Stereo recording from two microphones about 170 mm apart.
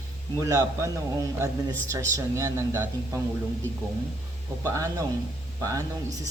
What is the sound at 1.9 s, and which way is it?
Speech, 15° right (ahead or behind).